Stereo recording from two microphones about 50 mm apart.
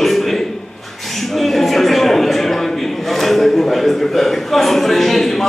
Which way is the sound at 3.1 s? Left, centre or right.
Centre.